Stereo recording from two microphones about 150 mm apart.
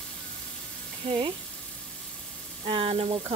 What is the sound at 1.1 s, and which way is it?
Frying, 35° right (ahead or behind).